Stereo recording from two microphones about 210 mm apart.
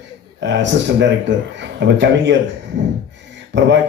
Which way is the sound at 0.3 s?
60° right (ahead or behind).